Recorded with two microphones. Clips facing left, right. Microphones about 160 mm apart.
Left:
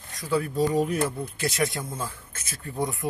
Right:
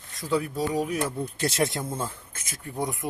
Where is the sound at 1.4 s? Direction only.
25° right (ahead or behind).